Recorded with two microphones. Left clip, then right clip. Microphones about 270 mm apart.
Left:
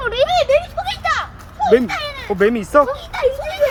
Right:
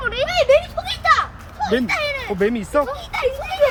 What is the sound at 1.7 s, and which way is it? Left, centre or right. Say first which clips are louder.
Speech: left 5 dB; centre.